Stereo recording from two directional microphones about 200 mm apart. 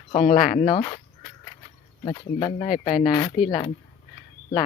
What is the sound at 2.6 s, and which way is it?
Speech, 45° left (ahead or behind).